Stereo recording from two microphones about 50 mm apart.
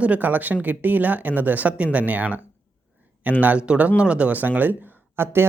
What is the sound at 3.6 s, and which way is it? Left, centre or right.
Speech, right.